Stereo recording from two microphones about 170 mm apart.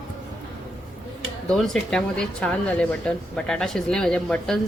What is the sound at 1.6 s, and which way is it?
Speech, 5° left (ahead or behind).